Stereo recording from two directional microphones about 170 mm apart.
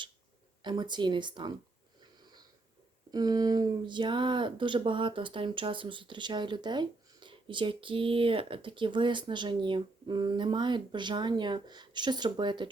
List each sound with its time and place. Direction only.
0.6 s speech: 25° right (ahead or behind)
3.1 s speech: 25° right (ahead or behind)